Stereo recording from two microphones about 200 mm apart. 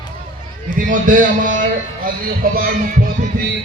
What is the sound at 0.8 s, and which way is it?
A man's voice, 40° right (ahead or behind).